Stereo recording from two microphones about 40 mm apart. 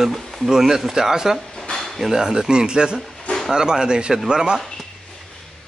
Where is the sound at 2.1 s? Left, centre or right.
Centre.